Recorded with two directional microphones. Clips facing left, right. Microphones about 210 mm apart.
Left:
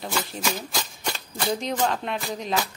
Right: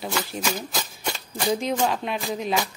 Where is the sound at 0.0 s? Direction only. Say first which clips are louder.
Right 1 dB; centre (ahead or behind).